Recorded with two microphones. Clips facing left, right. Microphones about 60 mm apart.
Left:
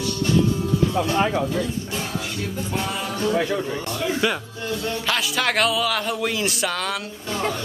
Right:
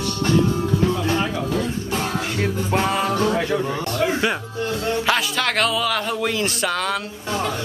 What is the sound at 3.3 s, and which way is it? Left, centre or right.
Speech, centre.